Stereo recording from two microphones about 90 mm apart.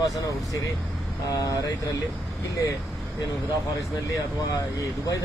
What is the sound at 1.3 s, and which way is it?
Speech, 45° left (ahead or behind).